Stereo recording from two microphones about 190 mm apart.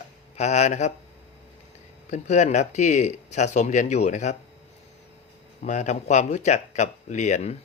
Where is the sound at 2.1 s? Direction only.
40° left (ahead or behind).